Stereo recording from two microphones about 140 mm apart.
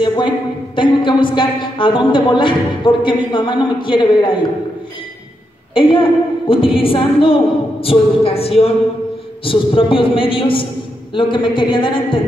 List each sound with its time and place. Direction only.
0.7 s a woman's voice: 35° left (ahead or behind)
5.8 s a woman's voice: 35° left (ahead or behind)